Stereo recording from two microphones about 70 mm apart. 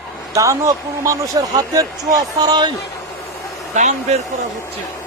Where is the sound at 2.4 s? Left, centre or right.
Right.